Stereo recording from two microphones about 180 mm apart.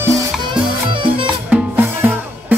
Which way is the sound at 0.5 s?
25° right (ahead or behind).